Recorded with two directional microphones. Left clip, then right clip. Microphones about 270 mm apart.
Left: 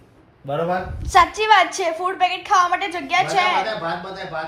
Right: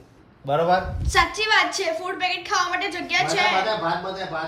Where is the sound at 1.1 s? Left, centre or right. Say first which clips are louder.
Left 5 dB; centre.